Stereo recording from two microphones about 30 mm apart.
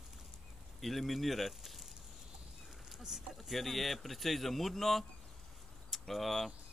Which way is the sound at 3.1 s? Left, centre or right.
Centre.